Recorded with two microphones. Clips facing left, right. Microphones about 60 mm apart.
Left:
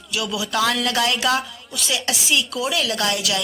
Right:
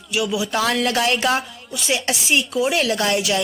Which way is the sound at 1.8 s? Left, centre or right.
Right.